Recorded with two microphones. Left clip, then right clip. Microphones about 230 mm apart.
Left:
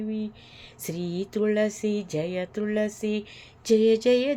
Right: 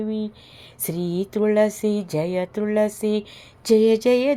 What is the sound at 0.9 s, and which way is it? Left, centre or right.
Speech, centre.